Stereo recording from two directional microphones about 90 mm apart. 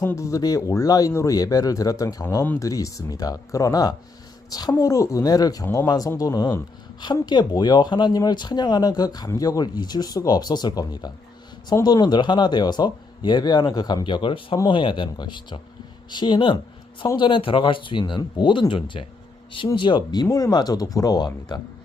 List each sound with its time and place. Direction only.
0.0 s a woman's voice: 35° left (ahead or behind)
7.3 s speech: 50° left (ahead or behind)
19.7 s speech: 60° left (ahead or behind)
20.3 s speech: 45° left (ahead or behind)